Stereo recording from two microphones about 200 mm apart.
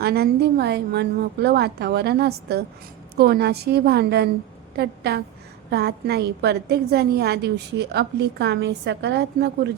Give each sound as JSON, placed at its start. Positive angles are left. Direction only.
{"t": 0.0, "sound": "a woman's voice", "side_deg": -50}